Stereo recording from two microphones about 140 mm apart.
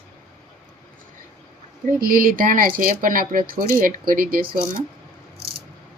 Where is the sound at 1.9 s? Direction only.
90° right.